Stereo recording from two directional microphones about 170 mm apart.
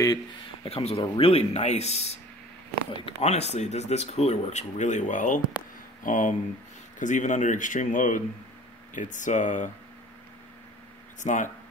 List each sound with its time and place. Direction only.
0.7 s speech: 35° left (ahead or behind)
11.1 s speech: 45° left (ahead or behind)